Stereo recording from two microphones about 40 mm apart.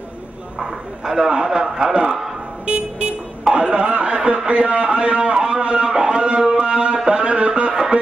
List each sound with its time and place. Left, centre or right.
0.6 s a man's voice: centre
2.6 s vehicle: right
3.6 s a man's voice: right
7.1 s a sound: right